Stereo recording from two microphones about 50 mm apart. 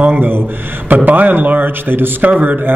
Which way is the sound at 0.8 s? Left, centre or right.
Right.